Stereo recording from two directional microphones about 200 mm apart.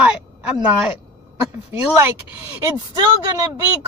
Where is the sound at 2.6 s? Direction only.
20° right (ahead or behind).